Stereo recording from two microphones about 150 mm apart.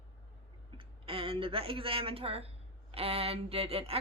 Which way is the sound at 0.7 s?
35° right (ahead or behind).